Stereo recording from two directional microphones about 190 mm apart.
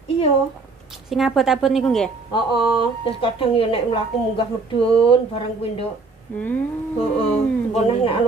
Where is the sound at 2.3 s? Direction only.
25° left (ahead or behind).